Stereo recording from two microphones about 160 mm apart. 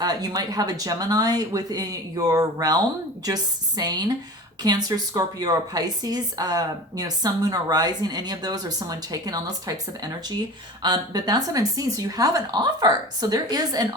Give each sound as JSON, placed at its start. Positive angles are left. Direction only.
{"t": 0.0, "sound": "speech", "side_deg": -25}